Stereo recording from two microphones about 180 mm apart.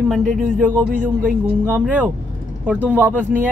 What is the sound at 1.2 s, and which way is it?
Speech, 10° right (ahead or behind).